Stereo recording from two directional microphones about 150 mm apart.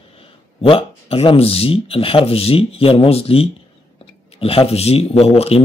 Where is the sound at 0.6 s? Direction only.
40° left (ahead or behind).